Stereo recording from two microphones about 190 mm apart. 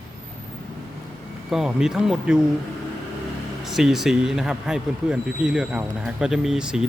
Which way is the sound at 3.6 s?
Centre (ahead or behind).